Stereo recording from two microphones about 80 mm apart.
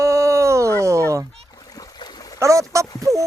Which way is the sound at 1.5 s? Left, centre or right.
Left.